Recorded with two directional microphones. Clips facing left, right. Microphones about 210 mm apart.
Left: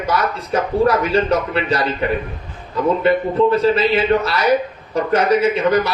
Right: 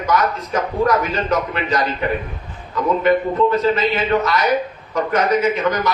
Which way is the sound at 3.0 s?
30° left (ahead or behind).